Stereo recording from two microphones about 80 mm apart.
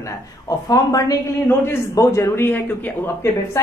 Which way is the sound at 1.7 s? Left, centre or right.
Left.